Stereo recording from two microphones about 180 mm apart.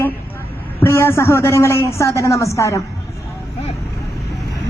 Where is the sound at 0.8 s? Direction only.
15° left (ahead or behind).